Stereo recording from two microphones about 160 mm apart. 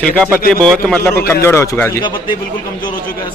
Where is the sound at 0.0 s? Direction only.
5° left (ahead or behind).